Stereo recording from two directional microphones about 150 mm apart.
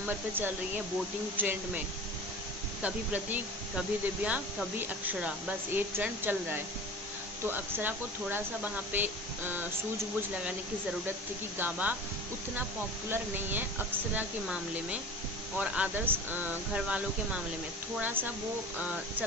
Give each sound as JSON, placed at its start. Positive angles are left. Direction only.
{"t": 0.0, "sound": "speech", "side_deg": -15}
{"t": 2.8, "sound": "speech", "side_deg": -10}
{"t": 11.5, "sound": "speech", "side_deg": -10}
{"t": 13.1, "sound": "speech", "side_deg": -15}